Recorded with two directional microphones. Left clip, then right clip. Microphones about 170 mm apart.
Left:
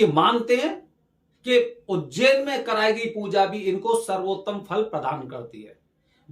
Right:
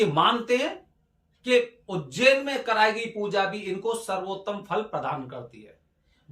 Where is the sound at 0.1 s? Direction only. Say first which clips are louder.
Left 3 dB; 20° left (ahead or behind).